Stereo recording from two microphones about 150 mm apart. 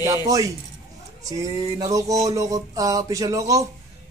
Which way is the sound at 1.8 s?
20° right (ahead or behind).